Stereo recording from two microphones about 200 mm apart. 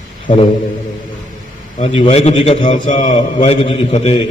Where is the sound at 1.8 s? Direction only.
30° left (ahead or behind).